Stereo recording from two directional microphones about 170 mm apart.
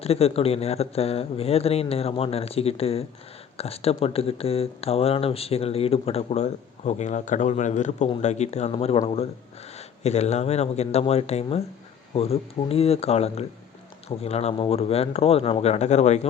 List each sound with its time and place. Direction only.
0.0 s speech: 35° left (ahead or behind)